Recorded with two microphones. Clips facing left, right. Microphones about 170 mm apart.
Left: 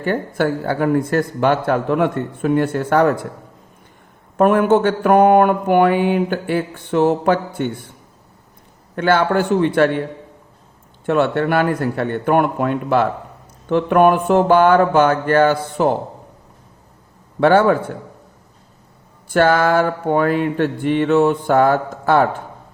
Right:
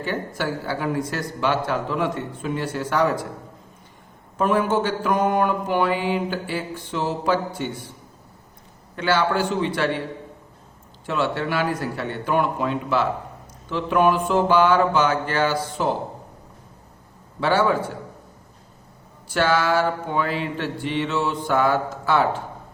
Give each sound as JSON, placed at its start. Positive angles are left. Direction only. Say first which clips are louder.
{"t": 0.0, "sound": "a man's voice", "louder": "left 7 dB", "side_deg": 50}
{"t": 4.4, "sound": "mantra", "louder": "left 7 dB", "side_deg": 60}
{"t": 9.0, "sound": "a man's voice", "louder": "left 5 dB", "side_deg": 55}
{"t": 11.0, "sound": "mantra", "louder": "left 8 dB", "side_deg": 55}
{"t": 17.4, "sound": "mantra", "louder": "left 7 dB", "side_deg": 55}
{"t": 19.3, "sound": "a man's voice", "louder": "left 6 dB", "side_deg": 50}